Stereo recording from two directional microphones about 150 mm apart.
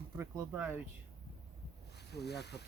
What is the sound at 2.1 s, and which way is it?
Speech, 90° left.